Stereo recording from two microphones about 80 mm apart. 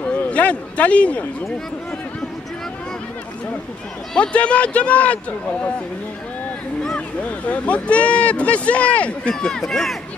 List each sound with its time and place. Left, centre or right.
0.0 s a man's voice: centre
4.1 s speech: centre
7.2 s speech: centre